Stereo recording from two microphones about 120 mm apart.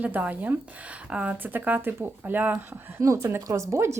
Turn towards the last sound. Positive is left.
turn(degrees=-25)  # may be behind; listen again after turning